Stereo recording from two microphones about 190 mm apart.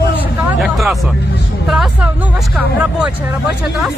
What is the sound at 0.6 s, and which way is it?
Speech, centre (ahead or behind).